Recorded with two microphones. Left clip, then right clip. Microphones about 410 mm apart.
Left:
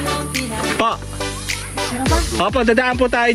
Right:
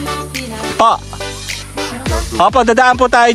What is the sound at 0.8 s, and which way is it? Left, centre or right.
Speech, centre.